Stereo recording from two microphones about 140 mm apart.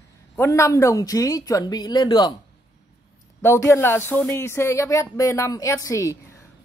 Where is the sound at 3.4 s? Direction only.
20° left (ahead or behind).